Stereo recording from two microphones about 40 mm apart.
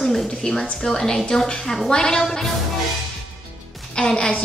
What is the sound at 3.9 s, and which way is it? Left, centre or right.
Speech, left.